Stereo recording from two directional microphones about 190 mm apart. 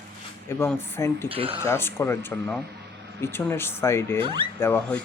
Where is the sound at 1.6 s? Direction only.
15° left (ahead or behind).